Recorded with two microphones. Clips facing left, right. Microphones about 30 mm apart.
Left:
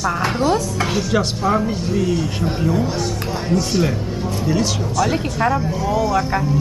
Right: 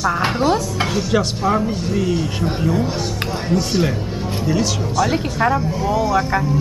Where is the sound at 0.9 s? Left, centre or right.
Centre.